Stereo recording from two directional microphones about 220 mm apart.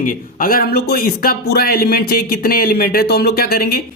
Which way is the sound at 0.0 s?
40° left (ahead or behind).